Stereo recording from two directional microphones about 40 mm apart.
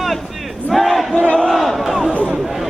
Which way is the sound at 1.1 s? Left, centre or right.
Left.